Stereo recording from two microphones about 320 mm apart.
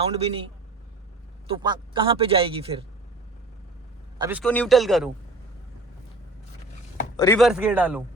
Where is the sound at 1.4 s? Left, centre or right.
Centre.